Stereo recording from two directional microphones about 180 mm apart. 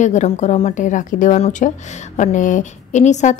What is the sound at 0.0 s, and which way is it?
A woman's voice, 40° left (ahead or behind).